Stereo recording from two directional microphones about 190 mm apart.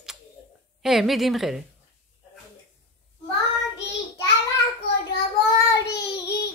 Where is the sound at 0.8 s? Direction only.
Centre (ahead or behind).